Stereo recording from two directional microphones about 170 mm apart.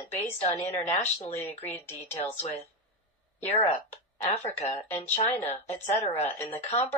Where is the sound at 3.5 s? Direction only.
40° left (ahead or behind).